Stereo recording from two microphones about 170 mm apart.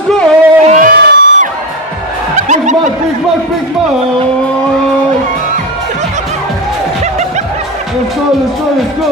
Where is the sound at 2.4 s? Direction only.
45° right (ahead or behind).